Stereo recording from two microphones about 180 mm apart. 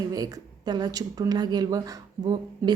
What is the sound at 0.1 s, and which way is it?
Speech, 20° right (ahead or behind).